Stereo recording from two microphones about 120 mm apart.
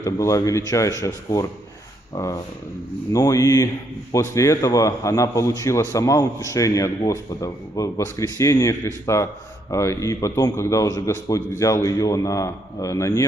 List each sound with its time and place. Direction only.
0.0 s a man's voice: 25° left (ahead or behind)